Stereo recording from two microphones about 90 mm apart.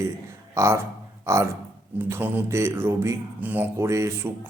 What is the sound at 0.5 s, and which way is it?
A man's voice, 35° right (ahead or behind).